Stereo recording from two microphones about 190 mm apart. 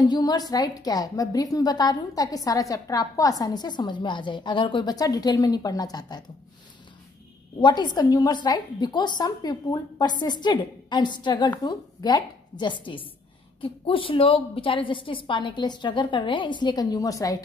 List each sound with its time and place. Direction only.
0.1 s a woman's voice: 20° left (ahead or behind)
7.6 s a woman's voice: 25° left (ahead or behind)